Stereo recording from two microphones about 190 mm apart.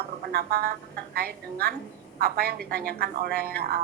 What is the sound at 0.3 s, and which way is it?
A woman's voice, 55° right (ahead or behind).